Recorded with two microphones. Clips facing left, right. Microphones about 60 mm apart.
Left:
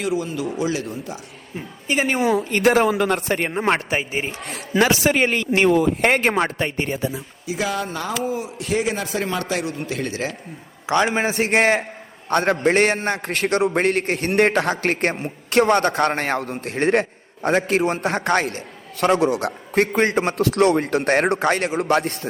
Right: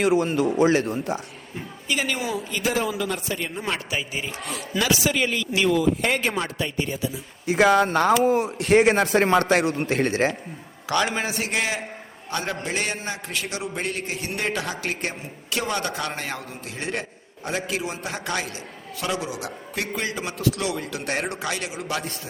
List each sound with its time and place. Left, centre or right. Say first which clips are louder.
0.0 s speech: right 3 dB; right
1.5 s a woman's voice: left 4 dB; left
2.2 s a man's voice: left 9 dB; left
4.4 s a man's voice: left 6 dB; left
7.4 s speech: right 7 dB; right
11.1 s a woman's voice: left 7 dB; left